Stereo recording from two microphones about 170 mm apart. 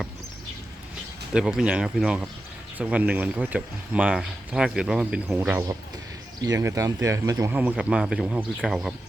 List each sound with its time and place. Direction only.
1.3 s speech: 5° right (ahead or behind)
7.5 s speech: 10° right (ahead or behind)